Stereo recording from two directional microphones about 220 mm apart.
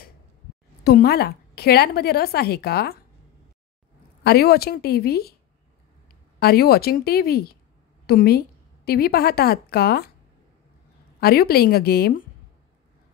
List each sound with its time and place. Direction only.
0.8 s a woman's voice: 45° left (ahead or behind)
4.2 s a woman's voice: 45° left (ahead or behind)
6.4 s a woman's voice: 45° left (ahead or behind)
11.1 s a woman's voice: 45° left (ahead or behind)